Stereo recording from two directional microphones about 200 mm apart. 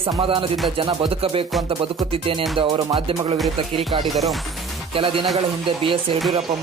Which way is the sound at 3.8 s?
Centre (ahead or behind).